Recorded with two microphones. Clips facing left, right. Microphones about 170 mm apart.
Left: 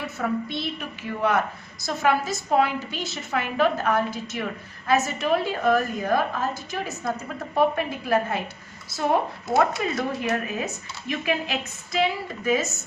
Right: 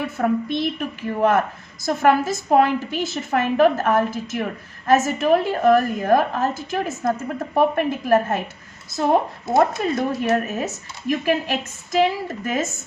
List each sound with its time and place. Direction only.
0.2 s a woman's voice: 50° right (ahead or behind)
9.6 s a woman's voice: 40° right (ahead or behind)